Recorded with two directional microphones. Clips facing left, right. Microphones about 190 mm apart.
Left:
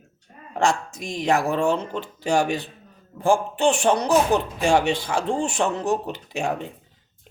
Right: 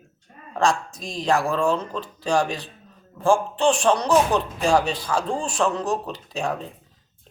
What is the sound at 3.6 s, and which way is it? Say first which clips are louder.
Speech: even; 25° left (ahead or behind).